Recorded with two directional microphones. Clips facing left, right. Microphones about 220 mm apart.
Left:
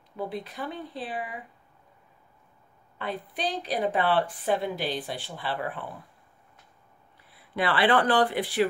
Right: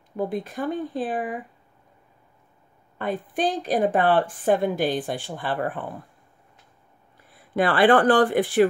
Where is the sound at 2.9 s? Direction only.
50° right (ahead or behind).